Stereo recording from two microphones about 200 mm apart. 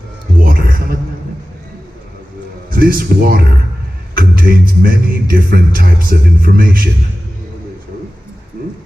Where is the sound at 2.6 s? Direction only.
45° right (ahead or behind).